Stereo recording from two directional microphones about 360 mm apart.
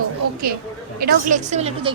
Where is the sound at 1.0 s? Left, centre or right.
Right.